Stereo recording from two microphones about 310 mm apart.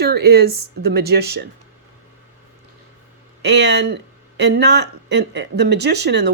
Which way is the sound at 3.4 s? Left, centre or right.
Right.